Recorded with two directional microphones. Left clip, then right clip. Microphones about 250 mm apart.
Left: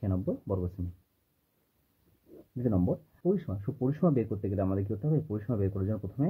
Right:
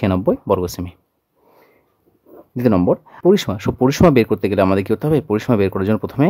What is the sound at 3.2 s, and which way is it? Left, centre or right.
Speech, right.